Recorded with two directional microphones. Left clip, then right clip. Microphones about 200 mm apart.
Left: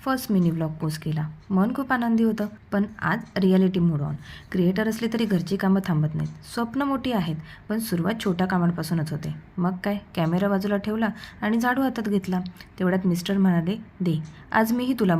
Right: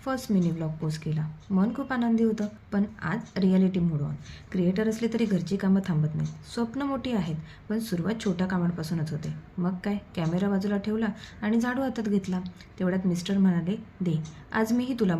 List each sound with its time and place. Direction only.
0.0 s a woman's voice: 30° left (ahead or behind)